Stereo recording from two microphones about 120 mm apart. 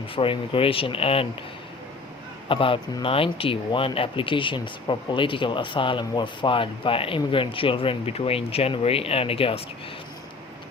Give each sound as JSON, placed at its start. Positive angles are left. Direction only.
{"t": 0.2, "sound": "speech", "side_deg": 50}
{"t": 2.5, "sound": "speech", "side_deg": 45}